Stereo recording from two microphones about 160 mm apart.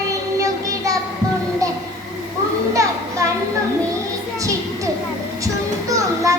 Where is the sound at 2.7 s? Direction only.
20° right (ahead or behind).